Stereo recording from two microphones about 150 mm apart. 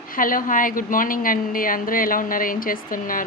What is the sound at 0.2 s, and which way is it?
Speech, 65° left (ahead or behind).